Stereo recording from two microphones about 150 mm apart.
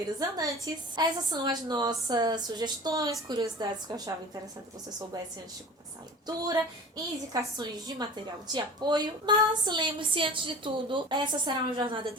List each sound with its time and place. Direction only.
0.2 s a woman's voice: 25° right (ahead or behind)
6.2 s a woman's voice: 25° right (ahead or behind)